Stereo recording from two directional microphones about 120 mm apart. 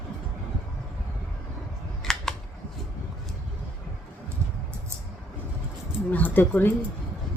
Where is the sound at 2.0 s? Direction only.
5° left (ahead or behind).